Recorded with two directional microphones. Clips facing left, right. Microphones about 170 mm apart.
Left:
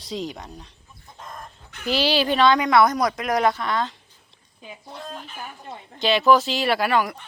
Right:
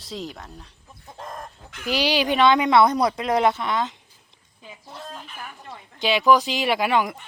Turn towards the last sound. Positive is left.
turn(degrees=-20)  # may be behind; listen again after turning